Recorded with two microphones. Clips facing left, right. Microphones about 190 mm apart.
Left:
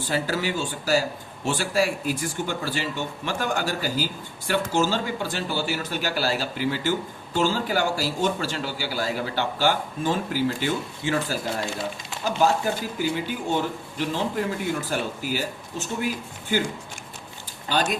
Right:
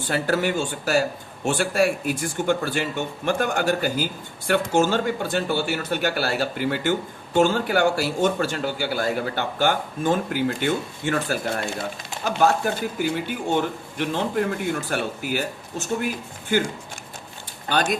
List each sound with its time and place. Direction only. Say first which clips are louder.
0.1 s speech: right 4 dB; 55° right (ahead or behind)